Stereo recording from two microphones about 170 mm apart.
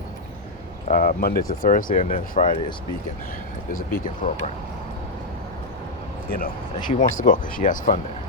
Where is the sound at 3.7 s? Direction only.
55° left (ahead or behind).